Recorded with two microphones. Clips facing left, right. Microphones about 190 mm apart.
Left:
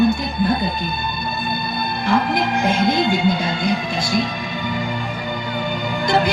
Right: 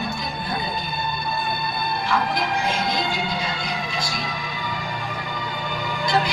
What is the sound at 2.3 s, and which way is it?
Music, 55° left (ahead or behind).